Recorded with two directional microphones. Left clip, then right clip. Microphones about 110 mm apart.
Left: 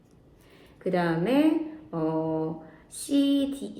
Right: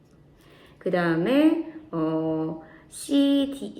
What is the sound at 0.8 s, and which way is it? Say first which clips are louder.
A woman's voice: right 3 dB; 20° right (ahead or behind).